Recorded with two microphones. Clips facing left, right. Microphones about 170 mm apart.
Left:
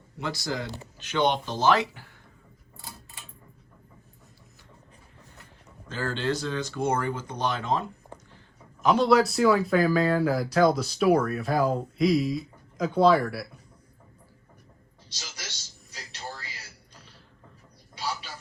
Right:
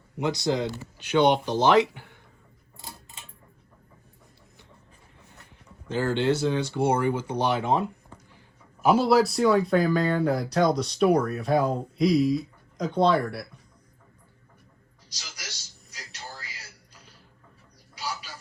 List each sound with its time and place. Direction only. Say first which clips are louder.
0.2 s speech: right 6 dB; 20° right (ahead or behind)
5.9 s speech: right 5 dB; 15° right (ahead or behind); by 13.5 s 5° left (ahead or behind)